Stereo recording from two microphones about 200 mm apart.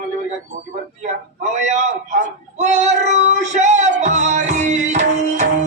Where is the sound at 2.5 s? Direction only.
35° right (ahead or behind).